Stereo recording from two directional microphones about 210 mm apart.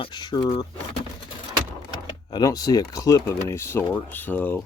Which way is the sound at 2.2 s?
20° left (ahead or behind).